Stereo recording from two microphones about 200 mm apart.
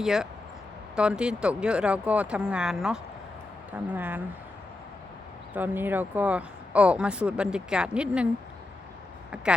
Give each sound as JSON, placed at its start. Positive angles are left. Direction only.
{"t": 0.0, "sound": "speech", "side_deg": 0}
{"t": 5.5, "sound": "speech", "side_deg": -10}
{"t": 9.3, "sound": "speech", "side_deg": -5}